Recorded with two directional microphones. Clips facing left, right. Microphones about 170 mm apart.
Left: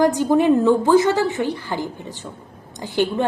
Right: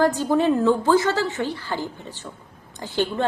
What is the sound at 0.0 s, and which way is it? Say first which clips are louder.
A woman's voice: left 3 dB; 15° left (ahead or behind).